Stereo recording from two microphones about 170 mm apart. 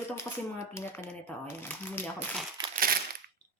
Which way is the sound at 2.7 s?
60° right (ahead or behind).